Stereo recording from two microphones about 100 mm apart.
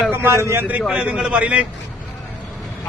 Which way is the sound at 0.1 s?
25° right (ahead or behind).